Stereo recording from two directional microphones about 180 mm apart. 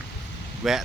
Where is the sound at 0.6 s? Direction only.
Centre (ahead or behind).